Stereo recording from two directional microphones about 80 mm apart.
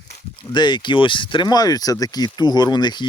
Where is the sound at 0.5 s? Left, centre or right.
Left.